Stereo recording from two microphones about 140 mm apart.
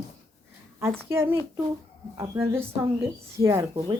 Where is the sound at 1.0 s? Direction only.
15° right (ahead or behind).